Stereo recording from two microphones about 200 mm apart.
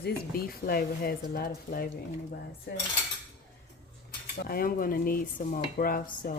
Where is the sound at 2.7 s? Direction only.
60° left (ahead or behind).